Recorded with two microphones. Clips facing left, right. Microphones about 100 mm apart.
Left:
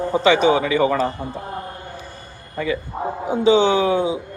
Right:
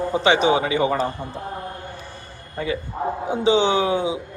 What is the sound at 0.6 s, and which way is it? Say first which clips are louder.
Speech: left 3 dB; 45° left (ahead or behind).